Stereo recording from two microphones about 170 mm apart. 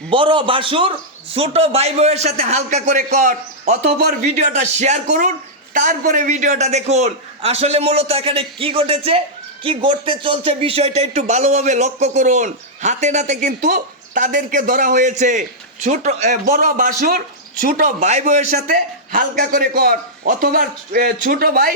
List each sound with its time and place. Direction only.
0.1 s a man's voice: 30° right (ahead or behind); by 21.7 s 60° right (ahead or behind)